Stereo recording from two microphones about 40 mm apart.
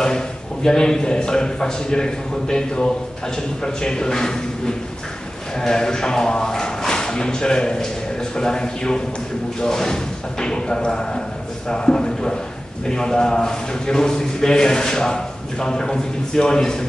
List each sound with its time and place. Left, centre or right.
0.7 s a man's voice: centre